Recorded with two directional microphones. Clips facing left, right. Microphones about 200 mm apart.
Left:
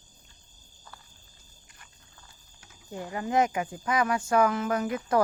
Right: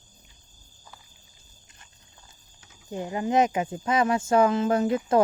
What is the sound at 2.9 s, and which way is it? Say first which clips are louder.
Speech: right 4 dB; 20° right (ahead or behind).